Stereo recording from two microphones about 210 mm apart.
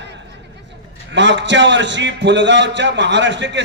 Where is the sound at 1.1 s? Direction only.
60° right (ahead or behind).